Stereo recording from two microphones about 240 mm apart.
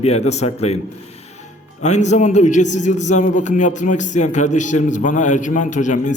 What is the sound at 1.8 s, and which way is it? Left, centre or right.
A man's voice, left.